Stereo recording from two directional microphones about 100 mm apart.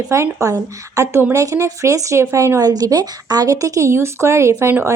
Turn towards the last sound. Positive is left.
turn(degrees=-25)  # may be behind; listen again after turning